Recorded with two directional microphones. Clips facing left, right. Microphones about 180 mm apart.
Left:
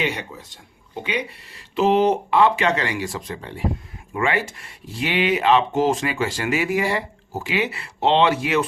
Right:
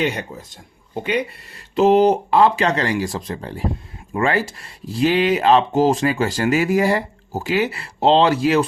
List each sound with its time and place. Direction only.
0.0 s speech: 45° right (ahead or behind)